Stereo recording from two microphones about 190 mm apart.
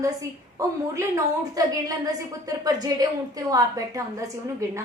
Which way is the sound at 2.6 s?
20° right (ahead or behind).